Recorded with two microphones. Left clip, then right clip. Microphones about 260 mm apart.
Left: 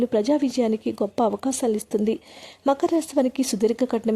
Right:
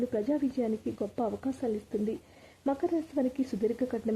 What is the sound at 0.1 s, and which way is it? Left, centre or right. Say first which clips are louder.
A woman's voice: left 9 dB; left.